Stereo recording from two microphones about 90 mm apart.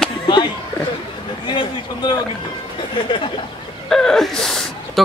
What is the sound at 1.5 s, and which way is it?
Speech, 60° left (ahead or behind).